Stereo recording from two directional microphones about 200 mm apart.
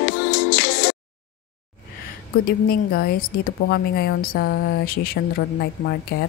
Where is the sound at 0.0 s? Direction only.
50° left (ahead or behind).